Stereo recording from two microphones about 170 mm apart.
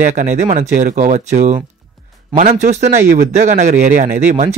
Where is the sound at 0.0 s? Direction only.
50° right (ahead or behind).